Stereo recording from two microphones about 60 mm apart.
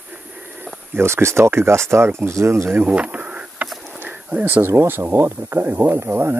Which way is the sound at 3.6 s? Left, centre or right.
Centre.